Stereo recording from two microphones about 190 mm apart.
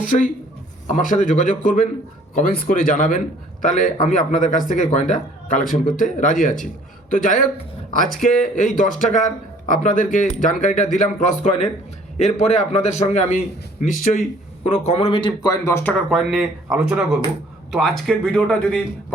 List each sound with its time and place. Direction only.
0.0 s speech: 45° left (ahead or behind)
8.5 s a man's voice: 40° left (ahead or behind); by 15.9 s 15° left (ahead or behind)
16.0 s speech: centre (ahead or behind)